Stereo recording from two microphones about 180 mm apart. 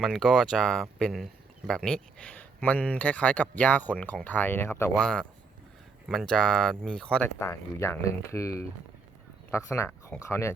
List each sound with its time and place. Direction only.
0.0 s speech: centre (ahead or behind)
6.1 s speech: 5° left (ahead or behind)